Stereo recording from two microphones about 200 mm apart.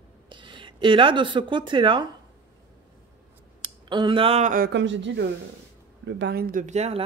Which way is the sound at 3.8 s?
25° right (ahead or behind).